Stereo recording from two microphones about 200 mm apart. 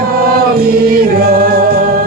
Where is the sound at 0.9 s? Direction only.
45° right (ahead or behind).